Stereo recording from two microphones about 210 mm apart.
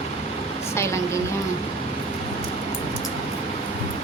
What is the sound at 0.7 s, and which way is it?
Speech, 15° left (ahead or behind).